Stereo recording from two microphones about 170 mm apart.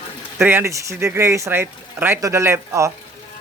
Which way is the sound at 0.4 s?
15° right (ahead or behind).